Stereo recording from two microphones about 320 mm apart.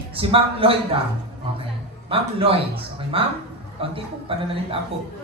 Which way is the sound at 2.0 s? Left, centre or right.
Centre.